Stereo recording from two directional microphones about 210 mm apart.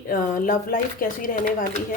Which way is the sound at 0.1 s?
45° left (ahead or behind).